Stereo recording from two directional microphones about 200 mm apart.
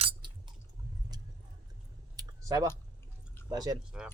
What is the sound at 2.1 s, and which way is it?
Typing, 15° right (ahead or behind).